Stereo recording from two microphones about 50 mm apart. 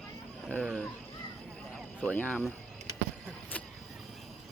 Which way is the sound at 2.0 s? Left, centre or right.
Left.